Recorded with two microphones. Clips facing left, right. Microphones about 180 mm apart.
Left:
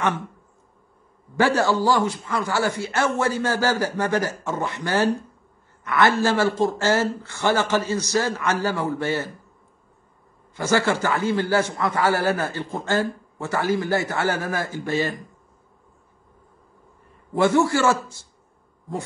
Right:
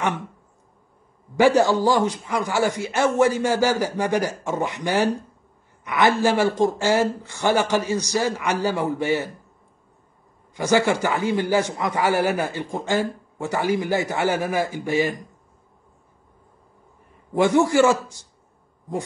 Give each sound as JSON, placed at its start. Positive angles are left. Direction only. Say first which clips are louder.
{"t": 1.3, "sound": "a man's voice", "louder": "right 3 dB", "side_deg": -15}
{"t": 10.5, "sound": "a man's voice", "louder": "right 2 dB", "side_deg": -15}
{"t": 17.3, "sound": "a man's voice", "louder": "right 1 dB", "side_deg": -20}